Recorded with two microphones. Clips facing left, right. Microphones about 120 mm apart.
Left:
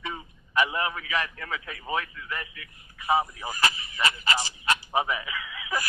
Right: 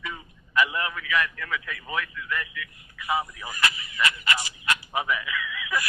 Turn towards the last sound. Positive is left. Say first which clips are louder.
# right 2 dB
turn(degrees=30)  # may be behind; listen again after turning